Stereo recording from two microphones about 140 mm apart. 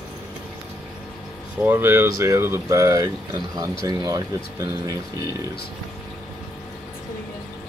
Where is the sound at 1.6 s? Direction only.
15° right (ahead or behind).